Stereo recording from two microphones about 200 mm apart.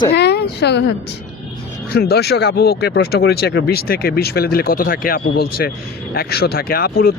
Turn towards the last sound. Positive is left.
turn(degrees=50)  # may be behind; listen again after turning